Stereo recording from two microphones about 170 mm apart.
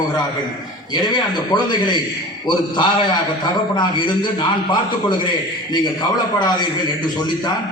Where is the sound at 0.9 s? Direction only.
25° left (ahead or behind).